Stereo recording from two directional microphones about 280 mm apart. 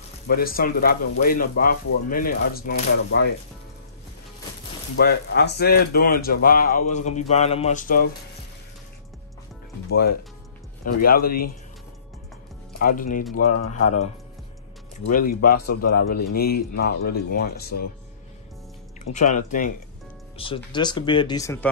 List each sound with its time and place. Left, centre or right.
0.3 s speech: left
4.9 s speech: left
9.8 s speech: left
11.2 s speech: left
12.7 s speech: left
13.3 s speech: left
15.0 s speech: left
19.1 s speech: left; by 21.6 s centre